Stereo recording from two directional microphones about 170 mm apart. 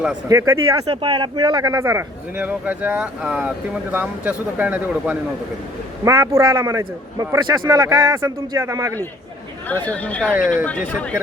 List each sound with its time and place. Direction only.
0.3 s a man's voice: 20° right (ahead or behind)
0.9 s speech: 30° right (ahead or behind); by 5.1 s 10° right (ahead or behind)
6.1 s a man's voice: 20° right (ahead or behind)
9.6 s speech: 10° left (ahead or behind)